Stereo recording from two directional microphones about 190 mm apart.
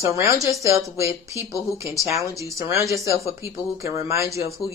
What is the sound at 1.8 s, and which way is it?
Speech, 15° right (ahead or behind).